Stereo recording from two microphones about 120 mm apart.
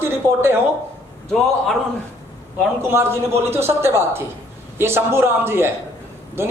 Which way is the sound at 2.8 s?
20° right (ahead or behind).